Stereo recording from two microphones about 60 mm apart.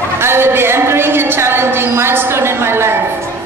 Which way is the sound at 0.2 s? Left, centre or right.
Right.